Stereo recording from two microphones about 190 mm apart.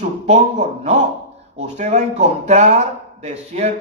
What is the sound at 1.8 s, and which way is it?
Speech, 35° right (ahead or behind).